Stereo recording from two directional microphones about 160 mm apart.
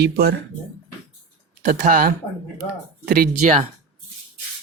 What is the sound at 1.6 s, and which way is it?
Speech, 55° right (ahead or behind).